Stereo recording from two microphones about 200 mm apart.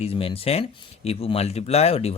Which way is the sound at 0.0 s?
30° left (ahead or behind).